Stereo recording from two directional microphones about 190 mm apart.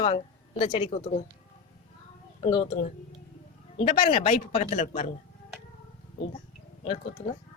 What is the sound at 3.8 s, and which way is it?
Speech, 30° left (ahead or behind).